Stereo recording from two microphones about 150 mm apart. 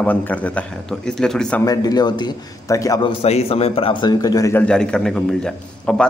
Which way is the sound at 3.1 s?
40° left (ahead or behind).